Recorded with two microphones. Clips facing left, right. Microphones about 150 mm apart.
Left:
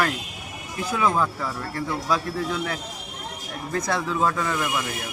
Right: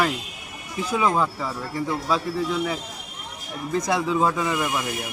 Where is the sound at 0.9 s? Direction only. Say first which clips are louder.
Right 1 dB; 10° right (ahead or behind).